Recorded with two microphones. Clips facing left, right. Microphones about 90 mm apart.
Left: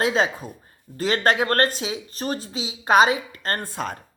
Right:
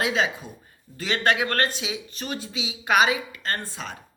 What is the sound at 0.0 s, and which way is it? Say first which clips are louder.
Speech: left 3 dB; 40° left (ahead or behind).